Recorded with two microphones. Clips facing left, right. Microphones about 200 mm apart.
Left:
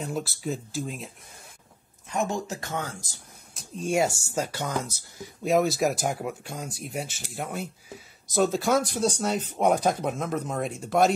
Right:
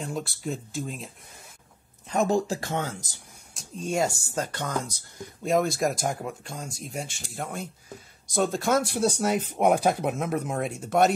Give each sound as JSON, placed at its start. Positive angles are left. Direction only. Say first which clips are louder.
{"t": 0.0, "sound": "speech", "louder": "left 1 dB", "side_deg": 0}
{"t": 2.1, "sound": "speech", "louder": "right 5 dB", "side_deg": -35}
{"t": 3.5, "sound": "speech", "louder": "left 2 dB", "side_deg": 5}
{"t": 8.9, "sound": "speech", "louder": "right 2 dB", "side_deg": -10}